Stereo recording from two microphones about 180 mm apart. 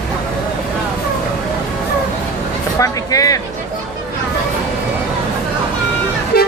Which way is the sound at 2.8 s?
20° left (ahead or behind).